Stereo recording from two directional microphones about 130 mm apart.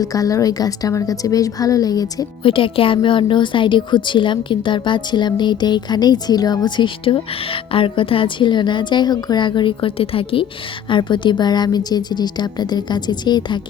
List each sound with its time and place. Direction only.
0.0 s a woman's voice: 25° left (ahead or behind)
2.4 s speech: 45° left (ahead or behind)